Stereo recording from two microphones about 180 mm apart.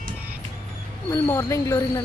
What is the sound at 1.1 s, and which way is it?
Speech, 15° left (ahead or behind).